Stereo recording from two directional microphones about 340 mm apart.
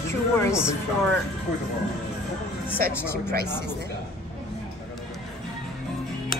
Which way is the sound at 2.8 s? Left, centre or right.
Right.